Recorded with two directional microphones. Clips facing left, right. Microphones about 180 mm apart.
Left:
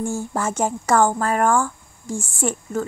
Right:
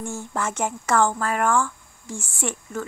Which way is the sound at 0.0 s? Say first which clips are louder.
Left 4 dB; 30° left (ahead or behind).